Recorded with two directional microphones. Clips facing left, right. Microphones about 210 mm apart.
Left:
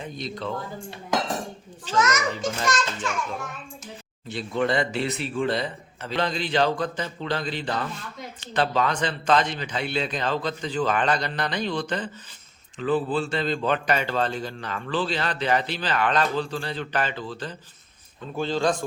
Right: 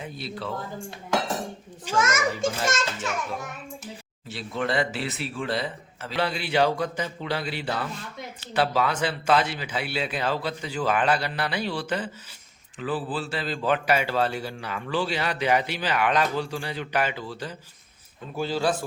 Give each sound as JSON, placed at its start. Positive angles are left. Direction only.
{"t": 0.0, "sound": "a man's voice", "side_deg": -5}
{"t": 2.0, "sound": "a child's voice", "side_deg": -25}
{"t": 4.3, "sound": "a man's voice", "side_deg": 0}